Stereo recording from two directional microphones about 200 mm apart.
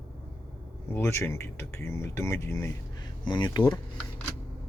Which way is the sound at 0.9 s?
15° left (ahead or behind).